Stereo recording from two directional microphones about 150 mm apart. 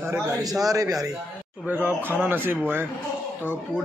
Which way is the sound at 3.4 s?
10° left (ahead or behind).